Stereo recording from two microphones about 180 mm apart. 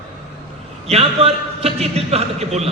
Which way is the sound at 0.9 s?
35° right (ahead or behind).